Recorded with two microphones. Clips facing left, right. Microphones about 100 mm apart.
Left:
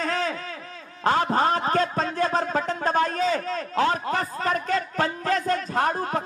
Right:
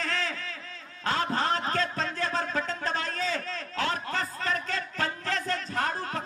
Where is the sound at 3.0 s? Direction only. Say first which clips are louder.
Left 9 dB; 20° left (ahead or behind).